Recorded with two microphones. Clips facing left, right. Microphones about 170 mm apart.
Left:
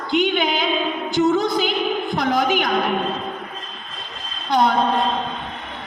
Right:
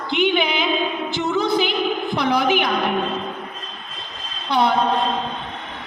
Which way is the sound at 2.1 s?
45° left (ahead or behind).